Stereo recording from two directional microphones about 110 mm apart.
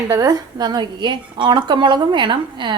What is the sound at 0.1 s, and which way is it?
A woman's voice, 35° right (ahead or behind).